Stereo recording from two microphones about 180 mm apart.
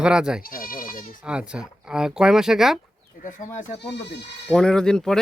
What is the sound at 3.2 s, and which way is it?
Speech, 45° left (ahead or behind).